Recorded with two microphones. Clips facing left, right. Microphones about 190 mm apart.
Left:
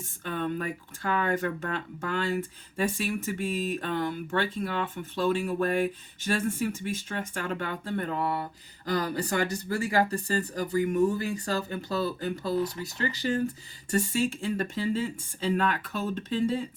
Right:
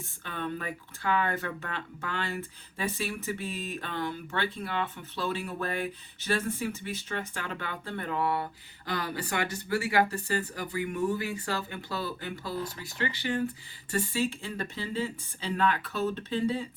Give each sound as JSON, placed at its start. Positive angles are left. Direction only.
{"t": 0.3, "sound": "speech", "side_deg": 45}